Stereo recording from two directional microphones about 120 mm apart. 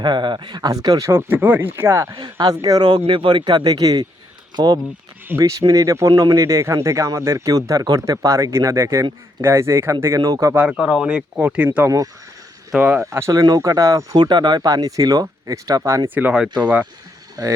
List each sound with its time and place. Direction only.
0.0 s speech: 40° right (ahead or behind)
10.6 s speech: 5° right (ahead or behind)
13.0 s speech: 25° right (ahead or behind)
16.1 s speech: 10° right (ahead or behind)
17.4 s speech: 30° right (ahead or behind)